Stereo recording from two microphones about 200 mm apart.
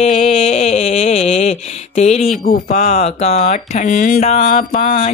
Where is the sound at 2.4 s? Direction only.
45° left (ahead or behind).